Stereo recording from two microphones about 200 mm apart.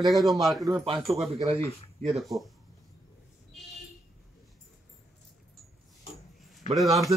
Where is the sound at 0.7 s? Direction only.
20° right (ahead or behind).